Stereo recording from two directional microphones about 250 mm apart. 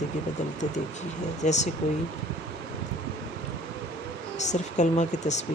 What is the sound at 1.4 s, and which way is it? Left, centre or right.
Speech, left.